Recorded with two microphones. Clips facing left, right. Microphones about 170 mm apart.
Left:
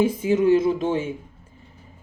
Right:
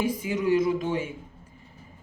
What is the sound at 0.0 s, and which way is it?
Speech, 25° left (ahead or behind).